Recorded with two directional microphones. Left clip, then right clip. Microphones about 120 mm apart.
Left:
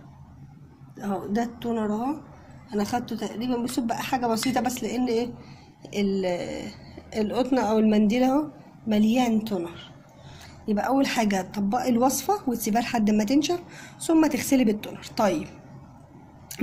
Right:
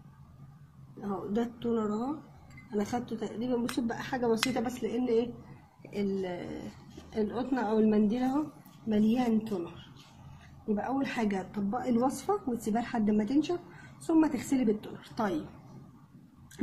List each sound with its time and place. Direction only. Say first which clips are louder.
1.1 s a woman's voice: left 5 dB; centre (ahead or behind)
6.2 s a woman's voice: left 10 dB; 15° left (ahead or behind)
10.7 s a woman's voice: left 8 dB; 15° left (ahead or behind)